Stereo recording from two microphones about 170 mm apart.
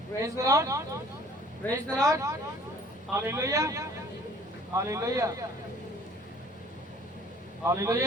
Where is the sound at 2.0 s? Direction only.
15° right (ahead or behind).